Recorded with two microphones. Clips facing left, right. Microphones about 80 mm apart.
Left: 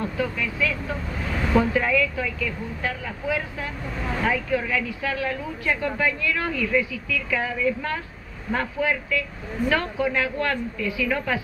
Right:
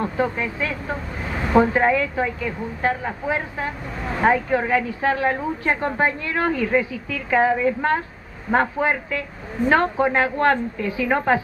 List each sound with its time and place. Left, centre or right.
0.0 s speech: right